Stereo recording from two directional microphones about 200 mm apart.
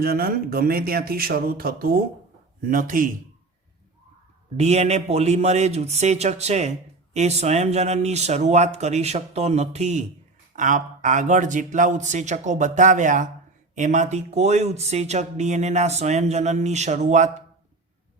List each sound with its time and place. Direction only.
0.0 s speech: 50° right (ahead or behind)
4.5 s a man's voice: 35° right (ahead or behind)